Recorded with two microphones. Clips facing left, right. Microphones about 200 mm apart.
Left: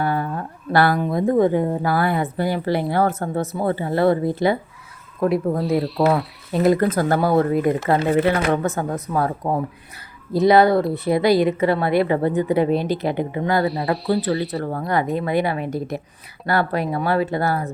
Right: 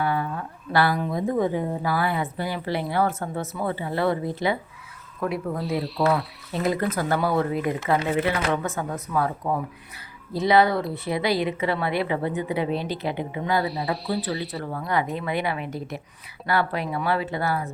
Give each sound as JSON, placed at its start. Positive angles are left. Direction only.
{"t": 0.0, "sound": "speech", "side_deg": 40}
{"t": 5.6, "sound": "speech", "side_deg": 0}
{"t": 6.6, "sound": "speech", "side_deg": 40}
{"t": 8.5, "sound": "speech", "side_deg": 40}
{"t": 13.7, "sound": "speech", "side_deg": 0}
{"t": 14.6, "sound": "speech", "side_deg": 45}